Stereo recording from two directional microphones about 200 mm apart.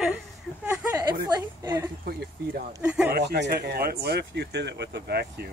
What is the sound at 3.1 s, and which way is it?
Speech, 55° right (ahead or behind).